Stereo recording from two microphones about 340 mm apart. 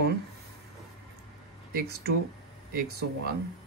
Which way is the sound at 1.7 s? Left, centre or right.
Right.